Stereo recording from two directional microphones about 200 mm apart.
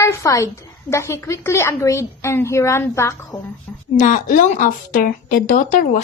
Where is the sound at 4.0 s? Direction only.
40° left (ahead or behind).